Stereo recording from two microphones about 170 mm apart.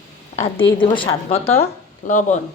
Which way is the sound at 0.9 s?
30° left (ahead or behind).